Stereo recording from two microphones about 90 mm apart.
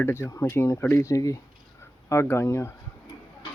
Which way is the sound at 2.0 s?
30° left (ahead or behind).